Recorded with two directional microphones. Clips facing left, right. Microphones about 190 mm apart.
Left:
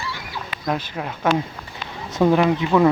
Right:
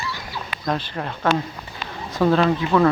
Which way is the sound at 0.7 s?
10° left (ahead or behind).